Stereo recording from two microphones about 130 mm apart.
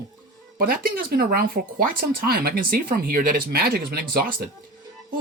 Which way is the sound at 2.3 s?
90° right.